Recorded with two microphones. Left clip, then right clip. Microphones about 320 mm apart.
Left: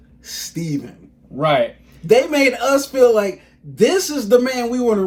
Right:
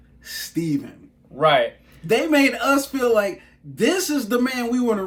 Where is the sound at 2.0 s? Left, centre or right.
Centre.